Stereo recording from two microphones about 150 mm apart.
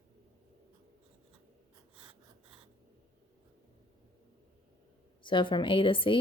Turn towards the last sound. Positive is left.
turn(degrees=35)  # may be behind; listen again after turning